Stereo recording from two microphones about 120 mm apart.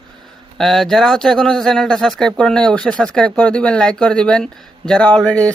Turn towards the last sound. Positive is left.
turn(degrees=10)  # may be behind; listen again after turning